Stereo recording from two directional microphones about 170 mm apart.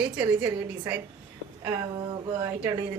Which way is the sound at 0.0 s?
5° right (ahead or behind).